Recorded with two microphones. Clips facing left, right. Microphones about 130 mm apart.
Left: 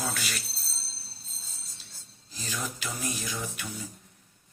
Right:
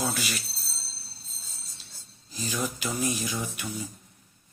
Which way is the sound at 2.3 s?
15° right (ahead or behind).